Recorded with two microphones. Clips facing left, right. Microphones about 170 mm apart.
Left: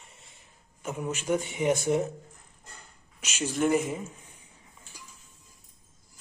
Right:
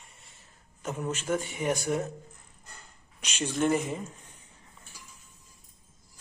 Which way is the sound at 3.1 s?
5° left (ahead or behind).